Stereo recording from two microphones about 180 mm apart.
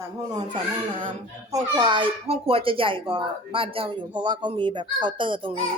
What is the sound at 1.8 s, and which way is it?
Speech, 25° right (ahead or behind).